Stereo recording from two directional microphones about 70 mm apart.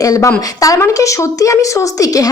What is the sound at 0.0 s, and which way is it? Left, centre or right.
A woman's voice, left.